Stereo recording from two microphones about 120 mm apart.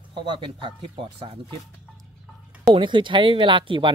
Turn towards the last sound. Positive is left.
turn(degrees=-40)  # may be behind; listen again after turning